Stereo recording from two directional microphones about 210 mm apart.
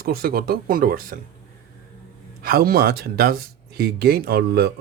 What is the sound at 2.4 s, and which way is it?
Speech, 45° right (ahead or behind).